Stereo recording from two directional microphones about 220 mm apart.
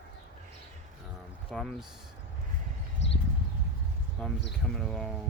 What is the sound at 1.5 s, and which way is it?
Speech, centre (ahead or behind).